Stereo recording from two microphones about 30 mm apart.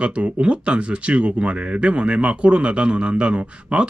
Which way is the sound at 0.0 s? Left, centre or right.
Right.